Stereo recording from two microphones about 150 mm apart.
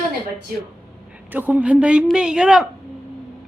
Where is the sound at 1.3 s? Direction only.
10° right (ahead or behind).